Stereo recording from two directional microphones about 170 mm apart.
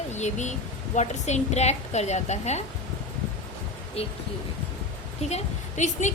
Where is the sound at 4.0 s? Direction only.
35° left (ahead or behind).